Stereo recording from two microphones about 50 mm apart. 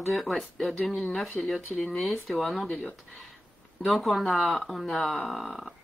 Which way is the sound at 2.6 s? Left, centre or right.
Left.